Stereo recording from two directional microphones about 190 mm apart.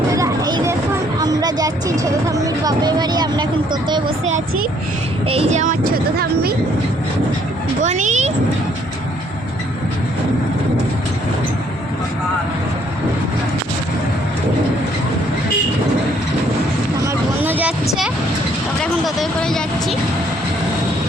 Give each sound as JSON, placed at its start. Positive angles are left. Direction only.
{"t": 0.1, "sound": "a sound", "side_deg": -20}
{"t": 1.2, "sound": "speech", "side_deg": -20}
{"t": 5.3, "sound": "speech", "side_deg": -35}
{"t": 7.9, "sound": "speech", "side_deg": -40}
{"t": 17.4, "sound": "a sound", "side_deg": -10}
{"t": 18.8, "sound": "speech", "side_deg": 0}